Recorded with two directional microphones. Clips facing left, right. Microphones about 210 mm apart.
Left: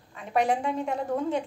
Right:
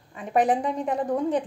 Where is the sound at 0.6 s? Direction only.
15° right (ahead or behind).